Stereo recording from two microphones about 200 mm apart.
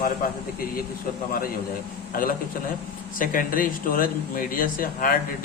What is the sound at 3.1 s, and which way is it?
Speech, 45° left (ahead or behind).